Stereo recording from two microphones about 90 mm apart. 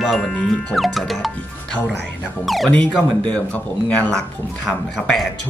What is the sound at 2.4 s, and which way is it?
Speech, centre (ahead or behind).